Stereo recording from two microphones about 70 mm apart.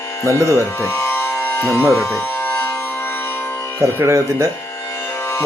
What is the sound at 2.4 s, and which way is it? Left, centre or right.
Music, left.